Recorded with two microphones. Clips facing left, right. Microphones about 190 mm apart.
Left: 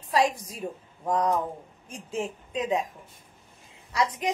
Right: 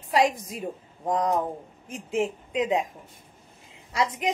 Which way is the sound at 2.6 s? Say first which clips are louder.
Right 2 dB; 20° right (ahead or behind).